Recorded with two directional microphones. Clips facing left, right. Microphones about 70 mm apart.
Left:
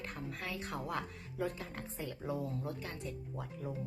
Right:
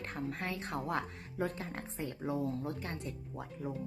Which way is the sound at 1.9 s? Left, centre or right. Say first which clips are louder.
Right 3 dB; right.